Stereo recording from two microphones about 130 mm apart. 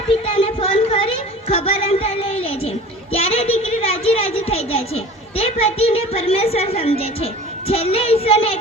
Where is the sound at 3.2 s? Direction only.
50° left (ahead or behind).